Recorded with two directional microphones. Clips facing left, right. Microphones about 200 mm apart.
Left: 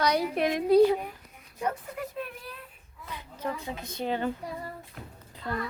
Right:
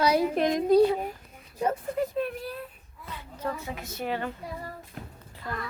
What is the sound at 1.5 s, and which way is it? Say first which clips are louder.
Speech: right 5 dB; 30° right (ahead or behind).